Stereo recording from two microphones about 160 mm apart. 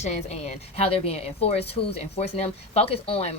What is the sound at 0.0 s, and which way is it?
Speech, 40° left (ahead or behind).